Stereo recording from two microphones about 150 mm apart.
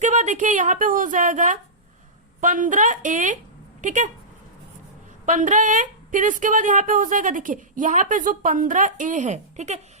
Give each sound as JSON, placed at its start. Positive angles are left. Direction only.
{"t": 0.0, "sound": "a woman's voice", "side_deg": -55}
{"t": 5.2, "sound": "a woman's voice", "side_deg": -55}